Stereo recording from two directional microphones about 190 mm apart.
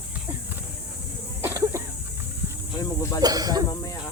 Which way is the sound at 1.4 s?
15° right (ahead or behind).